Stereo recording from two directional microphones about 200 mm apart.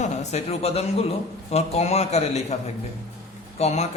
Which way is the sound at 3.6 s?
35° left (ahead or behind).